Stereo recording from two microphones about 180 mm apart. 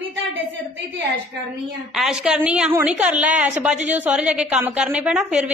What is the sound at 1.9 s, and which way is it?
A woman's voice, centre (ahead or behind).